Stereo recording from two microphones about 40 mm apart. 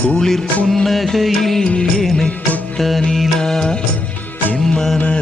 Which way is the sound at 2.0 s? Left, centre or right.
Centre.